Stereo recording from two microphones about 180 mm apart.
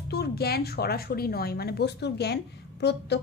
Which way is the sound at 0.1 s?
60° left (ahead or behind).